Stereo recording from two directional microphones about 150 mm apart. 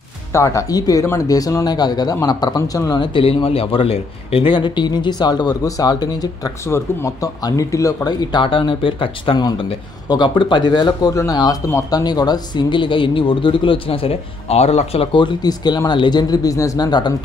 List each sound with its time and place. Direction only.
0.3 s speech: 20° left (ahead or behind)